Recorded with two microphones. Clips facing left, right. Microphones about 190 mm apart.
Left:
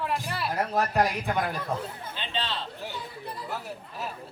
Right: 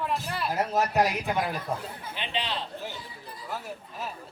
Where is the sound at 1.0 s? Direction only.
5° right (ahead or behind).